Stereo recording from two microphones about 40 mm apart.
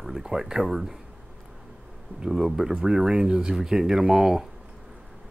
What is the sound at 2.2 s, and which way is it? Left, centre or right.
Speech, centre.